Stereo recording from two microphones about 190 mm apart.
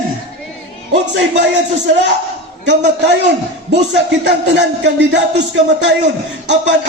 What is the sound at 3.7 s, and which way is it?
Speech, 65° right (ahead or behind).